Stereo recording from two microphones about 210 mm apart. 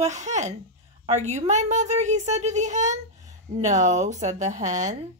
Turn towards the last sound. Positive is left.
turn(degrees=-35)  # may be behind; listen again after turning